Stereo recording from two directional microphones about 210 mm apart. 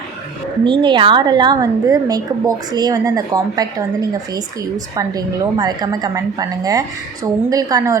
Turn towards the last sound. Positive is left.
turn(degrees=-15)  # may be behind; listen again after turning